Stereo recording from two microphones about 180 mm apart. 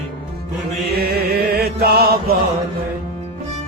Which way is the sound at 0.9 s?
60° right (ahead or behind).